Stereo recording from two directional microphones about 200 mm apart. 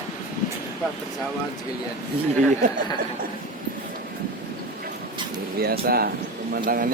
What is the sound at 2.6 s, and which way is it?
Speech, 40° right (ahead or behind).